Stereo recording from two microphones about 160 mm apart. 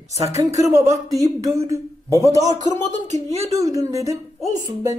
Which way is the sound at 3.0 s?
45° right (ahead or behind).